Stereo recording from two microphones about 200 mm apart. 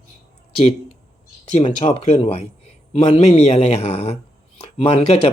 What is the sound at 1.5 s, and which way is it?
Speech, 30° left (ahead or behind).